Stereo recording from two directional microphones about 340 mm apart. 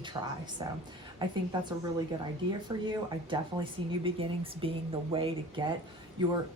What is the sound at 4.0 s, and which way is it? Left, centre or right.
Speech, centre.